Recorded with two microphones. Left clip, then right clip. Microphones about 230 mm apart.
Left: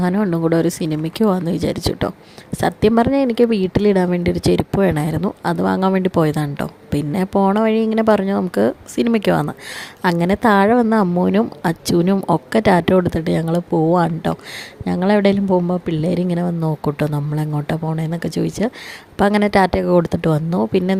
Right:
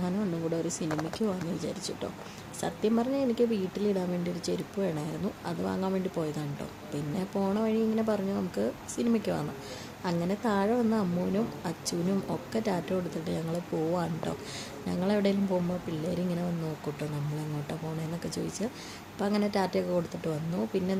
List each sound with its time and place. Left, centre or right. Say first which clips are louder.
0.0 s a woman's voice: left 14 dB; left
17.7 s a woman's voice: left 14 dB; left